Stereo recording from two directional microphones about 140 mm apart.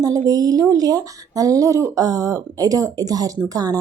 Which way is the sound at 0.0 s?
25° right (ahead or behind).